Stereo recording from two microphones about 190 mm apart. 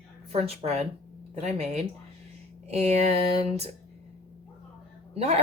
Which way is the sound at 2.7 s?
35° right (ahead or behind).